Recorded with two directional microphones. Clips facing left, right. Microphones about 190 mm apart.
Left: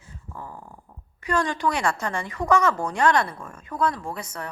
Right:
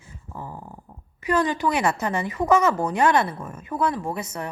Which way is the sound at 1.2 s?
5° right (ahead or behind).